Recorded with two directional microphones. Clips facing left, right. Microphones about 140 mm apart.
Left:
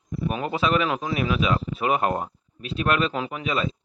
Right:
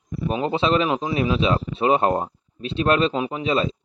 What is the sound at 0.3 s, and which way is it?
A man's voice, 25° right (ahead or behind).